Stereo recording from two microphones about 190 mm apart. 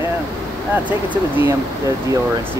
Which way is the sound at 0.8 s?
10° right (ahead or behind).